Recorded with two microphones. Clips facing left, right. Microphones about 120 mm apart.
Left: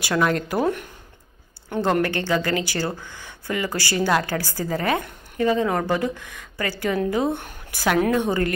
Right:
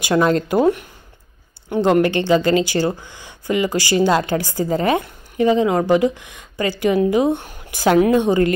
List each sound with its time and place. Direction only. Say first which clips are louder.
0.0 s speech: right 5 dB; 25° right (ahead or behind)
1.9 s a woman's voice: right 7 dB; 20° right (ahead or behind)